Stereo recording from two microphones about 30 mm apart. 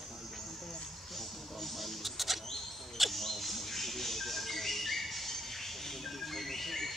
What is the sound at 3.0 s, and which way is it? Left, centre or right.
Bird, centre.